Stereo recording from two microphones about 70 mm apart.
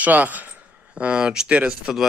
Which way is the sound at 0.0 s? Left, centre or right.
Right.